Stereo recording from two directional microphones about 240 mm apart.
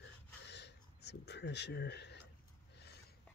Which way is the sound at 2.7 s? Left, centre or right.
Left.